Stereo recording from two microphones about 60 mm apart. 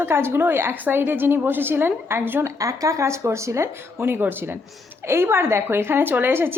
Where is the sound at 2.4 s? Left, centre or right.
Right.